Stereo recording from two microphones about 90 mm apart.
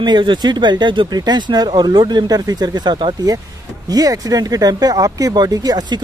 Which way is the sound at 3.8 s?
45° right (ahead or behind).